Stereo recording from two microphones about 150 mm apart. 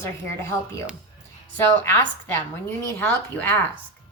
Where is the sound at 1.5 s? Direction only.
15° left (ahead or behind).